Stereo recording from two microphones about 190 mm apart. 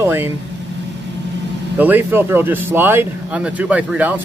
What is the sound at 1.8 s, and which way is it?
Speech, 10° right (ahead or behind).